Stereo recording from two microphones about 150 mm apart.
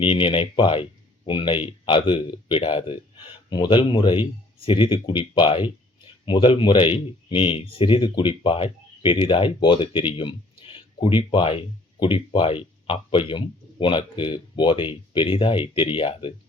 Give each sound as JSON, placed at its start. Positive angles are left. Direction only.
{"t": 0.0, "sound": "speech", "side_deg": 35}